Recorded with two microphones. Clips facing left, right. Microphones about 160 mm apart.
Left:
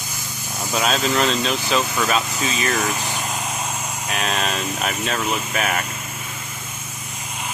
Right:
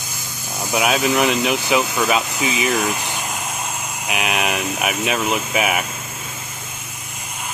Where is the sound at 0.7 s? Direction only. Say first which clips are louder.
Right 3 dB; 10° right (ahead or behind).